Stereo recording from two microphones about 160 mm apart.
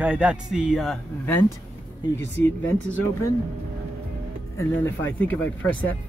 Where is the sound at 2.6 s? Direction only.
10° left (ahead or behind).